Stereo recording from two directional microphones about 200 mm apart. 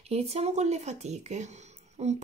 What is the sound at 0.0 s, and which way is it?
A woman's voice, 30° right (ahead or behind).